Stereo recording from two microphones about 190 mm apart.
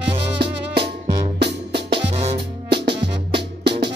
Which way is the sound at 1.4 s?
60° right (ahead or behind).